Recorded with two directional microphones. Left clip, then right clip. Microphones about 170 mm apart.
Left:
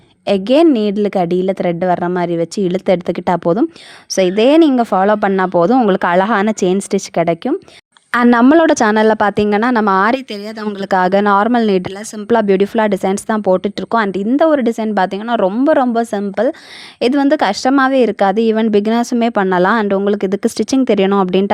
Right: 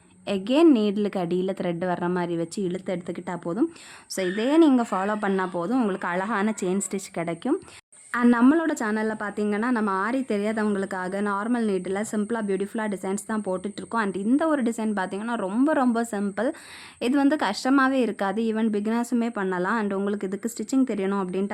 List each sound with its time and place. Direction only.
0.3 s a woman's voice: 40° left (ahead or behind)
8.1 s a woman's voice: 50° left (ahead or behind)